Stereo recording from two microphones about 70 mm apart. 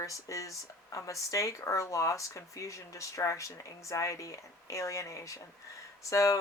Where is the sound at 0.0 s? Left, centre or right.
Left.